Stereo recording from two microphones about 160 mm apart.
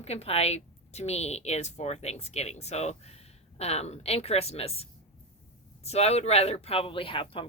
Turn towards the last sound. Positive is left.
turn(degrees=35)  # may be behind; listen again after turning